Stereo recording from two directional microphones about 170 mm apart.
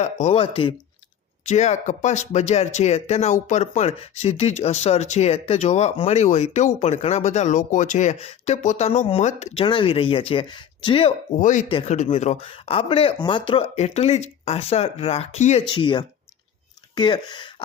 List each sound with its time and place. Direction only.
0.0 s speech: 40° left (ahead or behind)
11.3 s speech: 50° left (ahead or behind)
11.7 s speech: 35° left (ahead or behind)
15.7 s speech: 25° left (ahead or behind)